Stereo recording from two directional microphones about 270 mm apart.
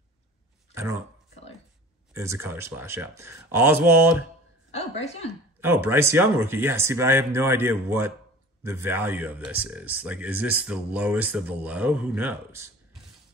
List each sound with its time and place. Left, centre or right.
2.1 s speech: centre
4.6 s a woman's voice: left
5.6 s speech: centre